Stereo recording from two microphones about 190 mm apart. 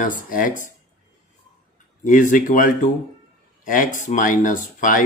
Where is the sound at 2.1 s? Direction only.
45° left (ahead or behind).